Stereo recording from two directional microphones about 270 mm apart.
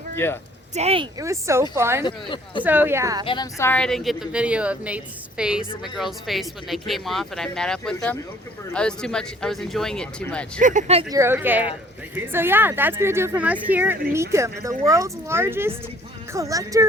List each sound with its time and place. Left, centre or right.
0.2 s speech: centre
0.7 s speech: right
1.2 s speech: centre
2.0 s speech: centre
2.6 s speech: centre
3.2 s speech: centre
10.6 s speech: right
11.2 s speech: centre